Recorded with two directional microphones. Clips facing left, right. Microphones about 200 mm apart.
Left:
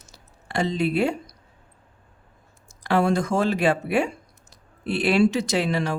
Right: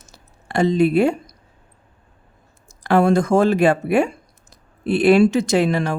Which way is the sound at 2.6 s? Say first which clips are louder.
Right 5 dB; 50° right (ahead or behind).